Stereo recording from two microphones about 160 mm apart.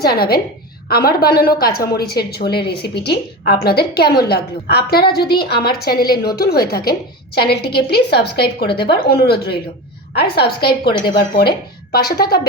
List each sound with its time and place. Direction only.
0.0 s a woman's voice: 75° left (ahead or behind)
7.3 s a woman's voice: 85° left